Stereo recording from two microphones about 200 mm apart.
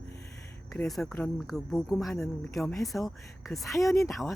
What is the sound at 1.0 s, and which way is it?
Speech, 15° left (ahead or behind).